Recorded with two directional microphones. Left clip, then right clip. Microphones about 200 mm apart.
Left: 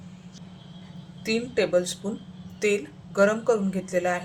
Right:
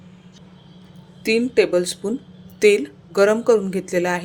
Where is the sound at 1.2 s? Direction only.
45° right (ahead or behind).